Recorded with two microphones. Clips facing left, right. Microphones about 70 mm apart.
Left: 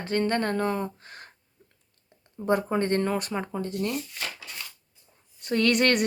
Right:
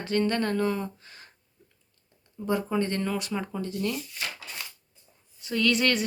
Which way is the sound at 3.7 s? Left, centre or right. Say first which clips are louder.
Even; left.